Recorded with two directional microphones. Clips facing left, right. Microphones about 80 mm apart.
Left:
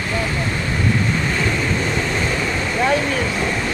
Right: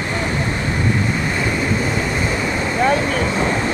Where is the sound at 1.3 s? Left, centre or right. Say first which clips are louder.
Right 1 dB; centre.